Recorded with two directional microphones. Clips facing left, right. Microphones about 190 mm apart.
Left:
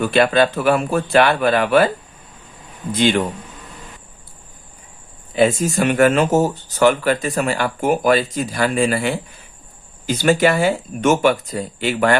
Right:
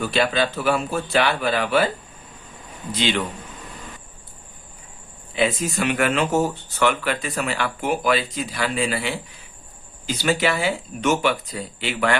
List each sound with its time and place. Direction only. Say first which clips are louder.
0.0 s speech: left 6 dB; 55° left (ahead or behind)
2.9 s speech: left 6 dB; 50° left (ahead or behind)
5.3 s speech: left 6 dB; 45° left (ahead or behind)